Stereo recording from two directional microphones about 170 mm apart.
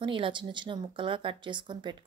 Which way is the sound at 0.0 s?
30° right (ahead or behind).